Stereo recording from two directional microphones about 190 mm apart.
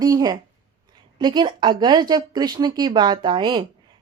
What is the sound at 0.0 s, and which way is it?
Speech, 20° right (ahead or behind).